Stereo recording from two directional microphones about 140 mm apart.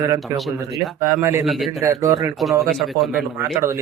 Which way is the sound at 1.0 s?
20° right (ahead or behind).